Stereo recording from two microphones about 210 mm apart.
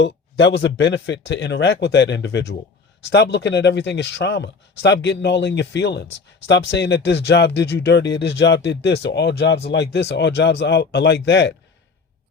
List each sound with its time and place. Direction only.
0.0 s speech: 60° left (ahead or behind)